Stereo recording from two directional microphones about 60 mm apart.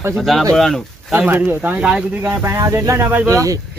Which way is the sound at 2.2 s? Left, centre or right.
Right.